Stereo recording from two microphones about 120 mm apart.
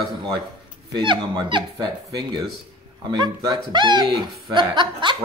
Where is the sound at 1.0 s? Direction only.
40° right (ahead or behind).